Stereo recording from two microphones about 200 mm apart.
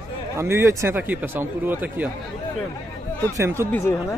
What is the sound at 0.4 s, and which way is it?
Speech, 15° right (ahead or behind).